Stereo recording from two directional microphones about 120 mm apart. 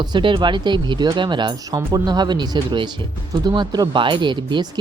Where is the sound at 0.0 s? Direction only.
40° right (ahead or behind).